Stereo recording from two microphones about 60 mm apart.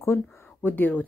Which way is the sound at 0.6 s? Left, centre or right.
Left.